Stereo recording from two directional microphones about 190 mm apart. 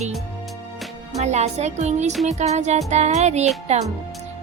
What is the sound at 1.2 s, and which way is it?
A woman's voice, 35° right (ahead or behind).